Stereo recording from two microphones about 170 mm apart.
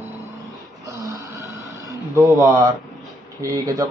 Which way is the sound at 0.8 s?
20° right (ahead or behind).